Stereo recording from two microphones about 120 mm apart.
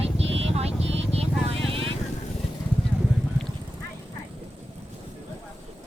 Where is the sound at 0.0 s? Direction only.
60° right (ahead or behind).